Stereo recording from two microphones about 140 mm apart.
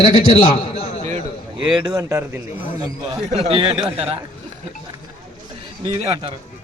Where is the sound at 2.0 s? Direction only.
20° right (ahead or behind).